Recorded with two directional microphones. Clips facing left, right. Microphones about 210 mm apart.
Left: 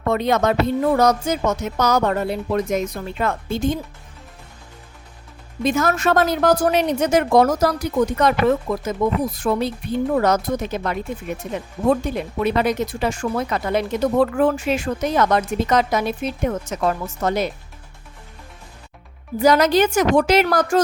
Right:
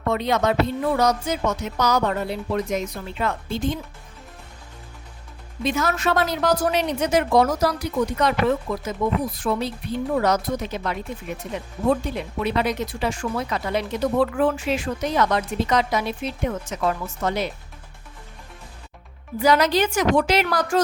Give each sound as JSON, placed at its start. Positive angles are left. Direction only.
{"t": 0.1, "sound": "speech", "side_deg": 50}
{"t": 5.6, "sound": "speech", "side_deg": 45}
{"t": 19.4, "sound": "speech", "side_deg": 45}